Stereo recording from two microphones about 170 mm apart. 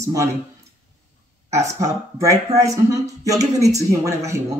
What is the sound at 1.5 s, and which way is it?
Speech, 20° right (ahead or behind).